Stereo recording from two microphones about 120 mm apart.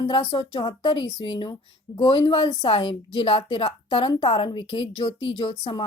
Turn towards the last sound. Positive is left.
turn(degrees=45)  # may be behind; listen again after turning